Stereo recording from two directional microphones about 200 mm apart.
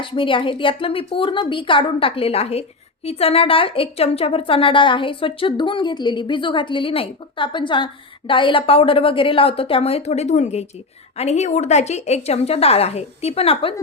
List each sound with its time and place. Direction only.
0.0 s a woman's voice: 25° left (ahead or behind)